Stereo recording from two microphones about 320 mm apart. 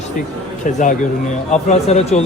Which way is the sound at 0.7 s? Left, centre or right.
Left.